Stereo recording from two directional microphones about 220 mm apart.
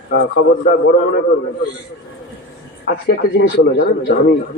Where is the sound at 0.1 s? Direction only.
55° left (ahead or behind).